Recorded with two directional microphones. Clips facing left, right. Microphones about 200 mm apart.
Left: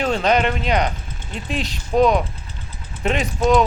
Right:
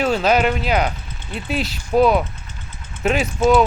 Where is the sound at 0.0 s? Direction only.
5° right (ahead or behind).